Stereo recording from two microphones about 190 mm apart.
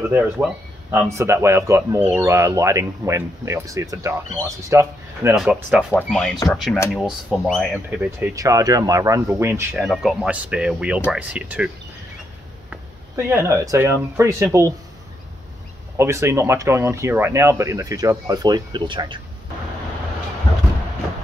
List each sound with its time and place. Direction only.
1.1 s speech: 15° right (ahead or behind)
5.3 s speech: centre (ahead or behind)
8.4 s speech: 20° right (ahead or behind)
9.8 s speech: centre (ahead or behind)
16.0 s speech: 15° right (ahead or behind)